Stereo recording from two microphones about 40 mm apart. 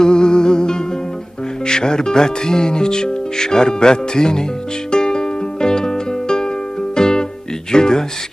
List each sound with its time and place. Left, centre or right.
0.0 s music: left
1.6 s speech: centre
4.9 s music: centre